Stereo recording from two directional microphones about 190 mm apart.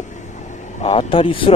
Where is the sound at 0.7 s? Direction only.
35° left (ahead or behind).